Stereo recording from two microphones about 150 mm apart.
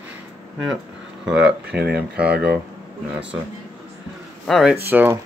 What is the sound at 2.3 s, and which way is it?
Speech, 90° right.